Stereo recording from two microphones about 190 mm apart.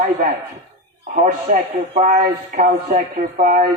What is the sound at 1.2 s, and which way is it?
Speech, 40° right (ahead or behind).